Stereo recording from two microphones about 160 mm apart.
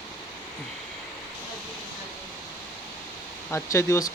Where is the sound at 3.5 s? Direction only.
15° left (ahead or behind).